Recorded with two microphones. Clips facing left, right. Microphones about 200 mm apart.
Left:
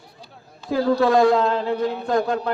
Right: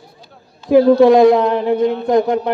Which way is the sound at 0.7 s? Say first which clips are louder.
Right 9 dB; 20° right (ahead or behind).